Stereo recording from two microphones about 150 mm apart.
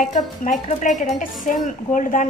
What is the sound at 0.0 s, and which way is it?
A woman's voice, 60° left (ahead or behind).